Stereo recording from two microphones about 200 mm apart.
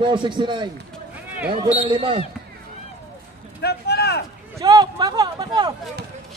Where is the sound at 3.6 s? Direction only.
55° left (ahead or behind).